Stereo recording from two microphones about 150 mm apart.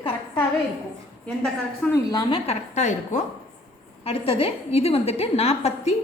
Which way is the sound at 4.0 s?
40° left (ahead or behind).